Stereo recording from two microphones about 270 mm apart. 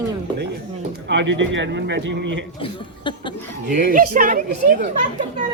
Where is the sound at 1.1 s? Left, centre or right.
Right.